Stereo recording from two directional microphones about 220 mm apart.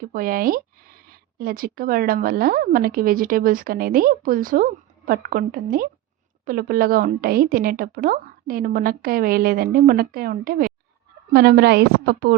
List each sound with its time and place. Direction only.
0.0 s a woman's voice: 40° right (ahead or behind)